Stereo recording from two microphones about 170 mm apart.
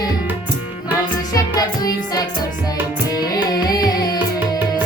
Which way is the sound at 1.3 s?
20° left (ahead or behind).